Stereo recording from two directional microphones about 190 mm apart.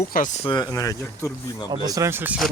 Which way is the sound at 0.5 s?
20° left (ahead or behind).